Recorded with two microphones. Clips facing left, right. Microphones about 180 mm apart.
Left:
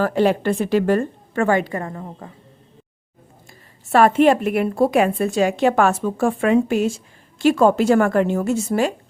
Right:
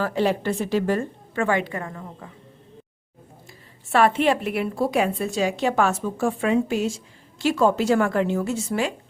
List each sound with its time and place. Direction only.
0.0 s a woman's voice: 55° left (ahead or behind)
1.5 s a woman's voice: 40° left (ahead or behind)
3.9 s a woman's voice: 45° left (ahead or behind)